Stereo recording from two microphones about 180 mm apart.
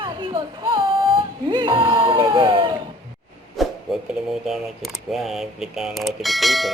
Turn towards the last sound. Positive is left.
turn(degrees=0)  # may be behind; listen again after turning